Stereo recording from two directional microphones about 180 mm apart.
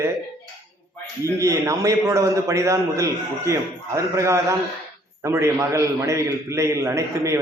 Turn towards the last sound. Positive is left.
turn(degrees=-15)  # may be behind; listen again after turning